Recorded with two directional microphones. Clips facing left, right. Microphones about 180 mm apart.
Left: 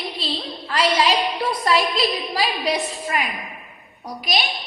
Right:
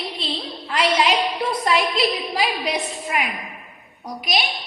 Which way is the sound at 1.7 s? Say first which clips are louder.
Left 1 dB; 20° right (ahead or behind).